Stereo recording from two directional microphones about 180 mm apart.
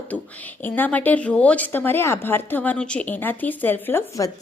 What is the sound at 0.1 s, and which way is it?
A woman's voice, 10° left (ahead or behind).